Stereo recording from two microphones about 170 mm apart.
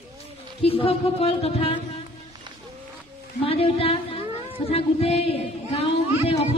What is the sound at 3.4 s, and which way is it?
A woman's voice, 35° left (ahead or behind).